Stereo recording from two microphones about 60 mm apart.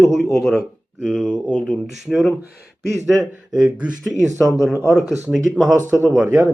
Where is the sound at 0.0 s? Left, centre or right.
Centre.